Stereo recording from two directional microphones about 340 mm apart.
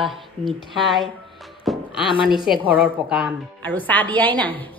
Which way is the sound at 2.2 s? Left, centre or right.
Centre.